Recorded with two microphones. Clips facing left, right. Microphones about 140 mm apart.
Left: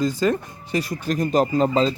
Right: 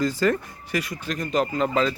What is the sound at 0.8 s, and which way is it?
Speech, 40° left (ahead or behind).